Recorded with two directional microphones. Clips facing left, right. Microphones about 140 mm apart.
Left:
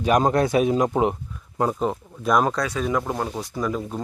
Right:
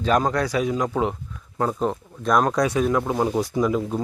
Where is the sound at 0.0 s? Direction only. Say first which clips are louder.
Left 2 dB; 20° left (ahead or behind).